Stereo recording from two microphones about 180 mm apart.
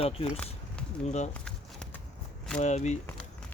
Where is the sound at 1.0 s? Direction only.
40° left (ahead or behind).